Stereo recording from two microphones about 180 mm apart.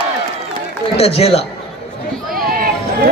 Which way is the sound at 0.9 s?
35° left (ahead or behind).